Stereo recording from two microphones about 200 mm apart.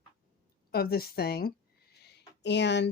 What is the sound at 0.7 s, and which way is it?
Speech, 50° left (ahead or behind).